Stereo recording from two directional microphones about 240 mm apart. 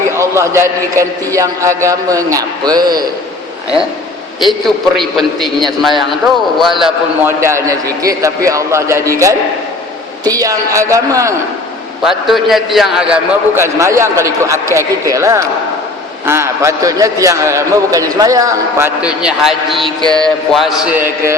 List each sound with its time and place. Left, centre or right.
0.2 s a man's voice: centre
4.9 s a man's voice: centre
10.2 s a man's voice: centre
12.0 s a man's voice: centre
20.0 s a man's voice: centre
20.2 s a man's voice: centre